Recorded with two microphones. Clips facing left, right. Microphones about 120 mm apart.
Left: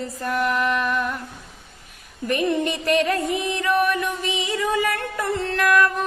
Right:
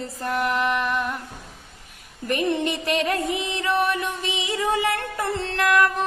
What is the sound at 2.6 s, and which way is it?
Music, 20° right (ahead or behind).